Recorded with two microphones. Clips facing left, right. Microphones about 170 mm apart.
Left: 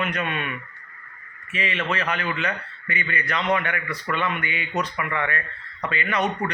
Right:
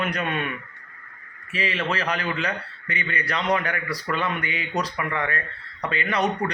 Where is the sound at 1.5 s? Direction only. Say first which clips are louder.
Even; 35° right (ahead or behind).